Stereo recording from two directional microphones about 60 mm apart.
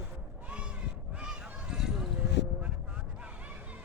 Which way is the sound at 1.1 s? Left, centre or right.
Centre.